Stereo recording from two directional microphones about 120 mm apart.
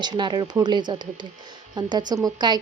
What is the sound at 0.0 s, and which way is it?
A woman's voice, 40° right (ahead or behind).